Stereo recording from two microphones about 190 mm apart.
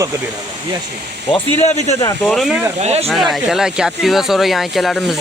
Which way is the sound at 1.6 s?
35° left (ahead or behind).